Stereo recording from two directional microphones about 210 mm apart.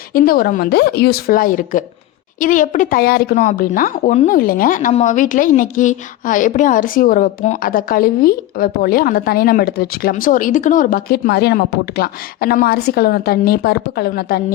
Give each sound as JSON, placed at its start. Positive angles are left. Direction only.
{"t": 0.1, "sound": "speech", "side_deg": 45}